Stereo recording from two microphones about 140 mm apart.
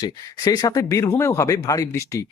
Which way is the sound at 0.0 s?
25° left (ahead or behind).